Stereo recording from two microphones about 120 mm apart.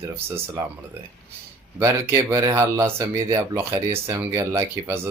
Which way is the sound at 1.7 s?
20° right (ahead or behind).